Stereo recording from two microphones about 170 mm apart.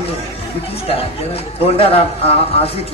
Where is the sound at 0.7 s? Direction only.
35° left (ahead or behind).